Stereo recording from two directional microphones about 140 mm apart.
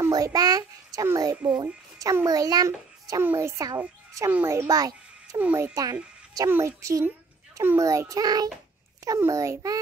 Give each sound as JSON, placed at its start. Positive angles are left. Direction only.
{"t": 0.0, "sound": "a child's voice", "side_deg": -25}